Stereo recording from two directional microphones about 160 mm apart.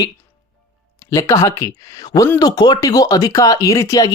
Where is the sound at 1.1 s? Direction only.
20° left (ahead or behind).